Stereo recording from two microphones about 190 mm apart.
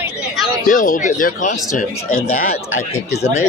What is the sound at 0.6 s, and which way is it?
Speech, 45° left (ahead or behind).